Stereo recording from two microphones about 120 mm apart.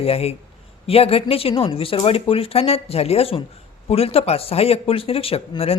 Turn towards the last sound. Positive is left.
turn(degrees=55)  # may be behind; listen again after turning